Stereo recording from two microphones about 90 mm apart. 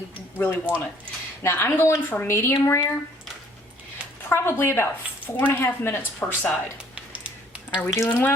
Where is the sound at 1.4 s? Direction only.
25° left (ahead or behind).